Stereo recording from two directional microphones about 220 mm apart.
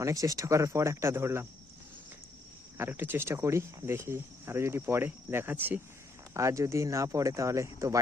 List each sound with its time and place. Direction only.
0.0 s speech: 15° right (ahead or behind)
2.7 s speech: 10° right (ahead or behind)